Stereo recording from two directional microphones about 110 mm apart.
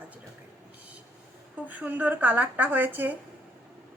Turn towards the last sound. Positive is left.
turn(degrees=-20)  # may be behind; listen again after turning